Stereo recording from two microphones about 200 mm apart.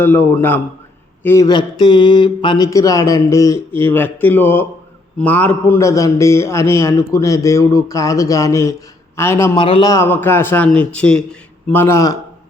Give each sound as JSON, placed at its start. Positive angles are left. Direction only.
{"t": 0.0, "sound": "a man's voice", "side_deg": 10}
{"t": 9.6, "sound": "a man's voice", "side_deg": 25}